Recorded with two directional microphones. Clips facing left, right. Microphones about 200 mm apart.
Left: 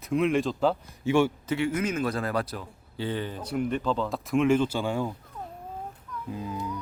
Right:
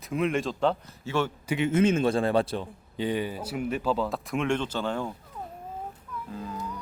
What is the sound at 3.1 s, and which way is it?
Speech, 10° right (ahead or behind).